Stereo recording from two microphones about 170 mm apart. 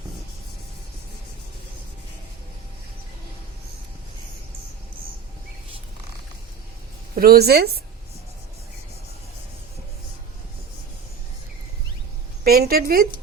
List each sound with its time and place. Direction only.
7.2 s a woman's voice: 65° right (ahead or behind)
12.5 s a woman's voice: 65° right (ahead or behind)